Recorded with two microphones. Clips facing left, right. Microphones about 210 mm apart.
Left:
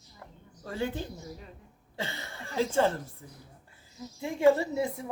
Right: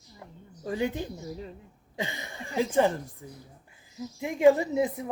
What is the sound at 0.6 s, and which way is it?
A woman's voice, 15° right (ahead or behind).